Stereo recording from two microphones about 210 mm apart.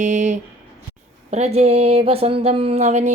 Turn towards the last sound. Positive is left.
turn(degrees=-35)  # may be behind; listen again after turning